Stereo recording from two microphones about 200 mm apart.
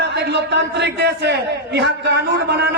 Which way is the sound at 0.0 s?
60° right (ahead or behind).